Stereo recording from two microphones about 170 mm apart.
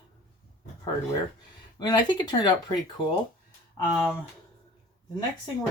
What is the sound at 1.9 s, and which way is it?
Speech, 25° left (ahead or behind).